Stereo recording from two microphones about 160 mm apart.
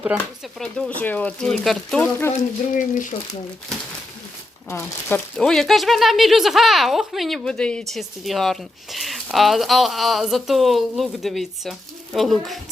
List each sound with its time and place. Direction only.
0.1 s speech: 10° right (ahead or behind)
0.6 s speech: 5° left (ahead or behind)
2.7 s speech: 55° left (ahead or behind)
4.7 s speech: 15° left (ahead or behind)
5.4 s speech: 5° left (ahead or behind)